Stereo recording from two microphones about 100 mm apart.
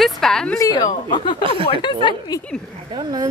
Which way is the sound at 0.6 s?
35° left (ahead or behind).